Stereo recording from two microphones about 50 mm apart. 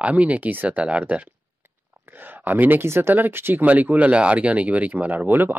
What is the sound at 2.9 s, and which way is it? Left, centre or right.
Speech, right.